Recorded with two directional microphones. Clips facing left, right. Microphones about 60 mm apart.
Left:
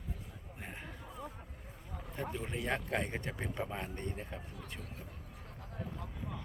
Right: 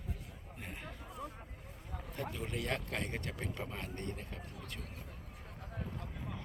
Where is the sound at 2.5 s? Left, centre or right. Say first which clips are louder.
Left 4 dB; centre.